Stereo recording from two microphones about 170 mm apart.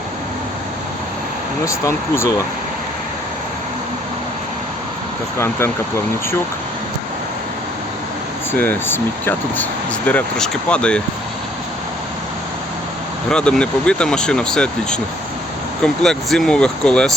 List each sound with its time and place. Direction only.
1.6 s speech: 15° left (ahead or behind)
5.4 s speech: 15° left (ahead or behind)
8.5 s speech: 10° left (ahead or behind)
13.3 s speech: 5° left (ahead or behind)